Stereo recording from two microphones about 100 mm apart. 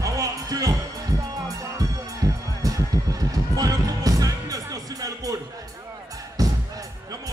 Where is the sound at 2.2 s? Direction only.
35° right (ahead or behind).